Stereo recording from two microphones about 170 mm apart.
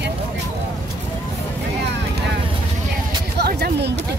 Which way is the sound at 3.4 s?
75° right (ahead or behind).